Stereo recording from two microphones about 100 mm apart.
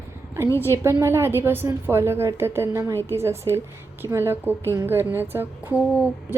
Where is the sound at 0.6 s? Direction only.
25° right (ahead or behind).